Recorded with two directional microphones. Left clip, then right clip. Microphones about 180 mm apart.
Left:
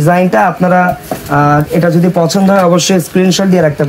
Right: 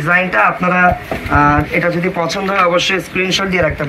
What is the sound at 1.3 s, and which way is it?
Speech, 65° left (ahead or behind).